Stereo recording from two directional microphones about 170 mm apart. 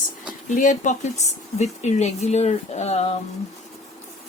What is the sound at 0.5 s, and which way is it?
Speech, 50° left (ahead or behind).